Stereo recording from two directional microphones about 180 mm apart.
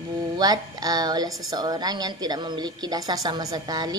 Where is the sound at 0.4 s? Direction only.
20° right (ahead or behind).